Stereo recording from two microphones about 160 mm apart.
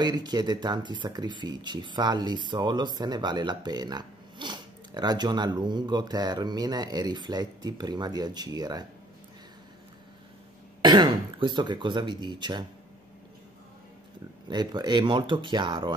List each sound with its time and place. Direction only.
0.0 s speech: 25° right (ahead or behind)
10.8 s speech: 30° right (ahead or behind)
14.5 s speech: 25° right (ahead or behind)